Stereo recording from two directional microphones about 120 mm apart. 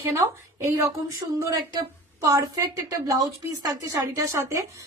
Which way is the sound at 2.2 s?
30° right (ahead or behind).